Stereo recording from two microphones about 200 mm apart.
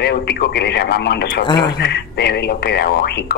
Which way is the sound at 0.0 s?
55° left (ahead or behind).